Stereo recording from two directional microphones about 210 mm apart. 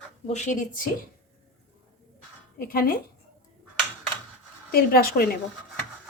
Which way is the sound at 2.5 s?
45° left (ahead or behind).